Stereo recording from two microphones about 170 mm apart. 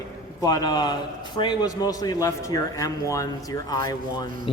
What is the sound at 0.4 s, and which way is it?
A man's voice, 20° left (ahead or behind).